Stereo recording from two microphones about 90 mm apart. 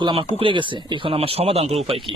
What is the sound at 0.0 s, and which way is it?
Speech, 70° right (ahead or behind).